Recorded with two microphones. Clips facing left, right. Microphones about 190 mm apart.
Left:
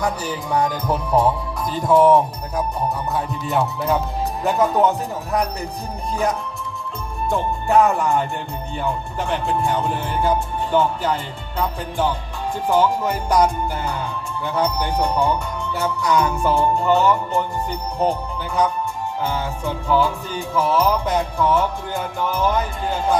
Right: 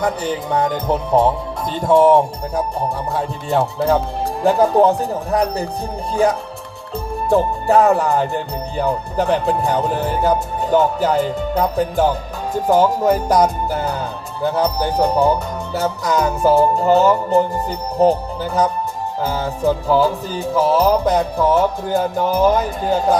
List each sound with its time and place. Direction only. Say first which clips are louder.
0.0 s music: right 4 dB; 25° right (ahead or behind)
7.3 s music: right 6 dB; 35° right (ahead or behind)
14.4 s music: right 4 dB; 35° right (ahead or behind)